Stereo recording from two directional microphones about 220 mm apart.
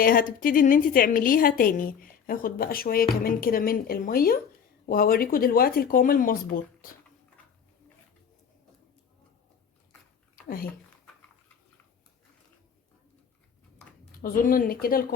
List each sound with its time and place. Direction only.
0.0 s a woman's voice: 40° left (ahead or behind)
14.2 s a woman's voice: 40° left (ahead or behind)